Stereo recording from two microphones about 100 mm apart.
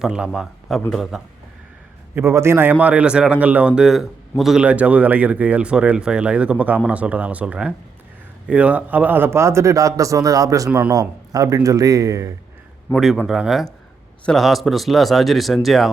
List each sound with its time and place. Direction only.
0.0 s speech: 5° right (ahead or behind)
2.1 s a man's voice: 25° right (ahead or behind)
10.7 s speech: 15° right (ahead or behind)
10.9 s speech: 35° right (ahead or behind)
13.2 s speech: 5° right (ahead or behind)